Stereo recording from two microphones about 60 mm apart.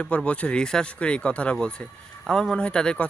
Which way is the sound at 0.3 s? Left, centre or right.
Left.